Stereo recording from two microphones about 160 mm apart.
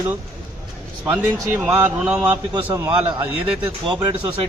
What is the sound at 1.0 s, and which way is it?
A man's voice, 10° right (ahead or behind).